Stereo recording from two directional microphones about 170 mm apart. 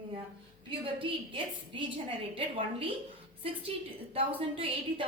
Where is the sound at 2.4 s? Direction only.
30° right (ahead or behind).